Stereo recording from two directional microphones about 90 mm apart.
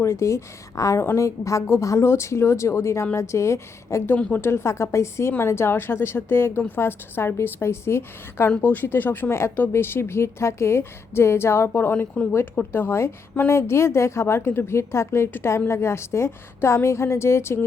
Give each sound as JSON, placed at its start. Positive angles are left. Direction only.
{"t": 0.0, "sound": "speech", "side_deg": 30}
{"t": 4.1, "sound": "a woman's voice", "side_deg": 20}